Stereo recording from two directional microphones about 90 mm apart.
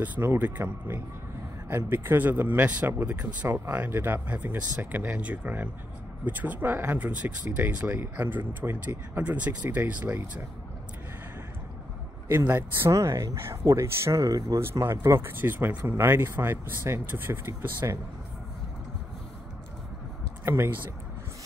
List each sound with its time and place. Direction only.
0.0 s speech: 20° right (ahead or behind)
12.3 s speech: 25° right (ahead or behind)
12.9 s speech: 35° right (ahead or behind)
20.4 s speech: 25° right (ahead or behind)